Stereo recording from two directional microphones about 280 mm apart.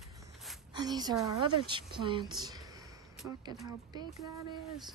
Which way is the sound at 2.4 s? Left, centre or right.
Centre.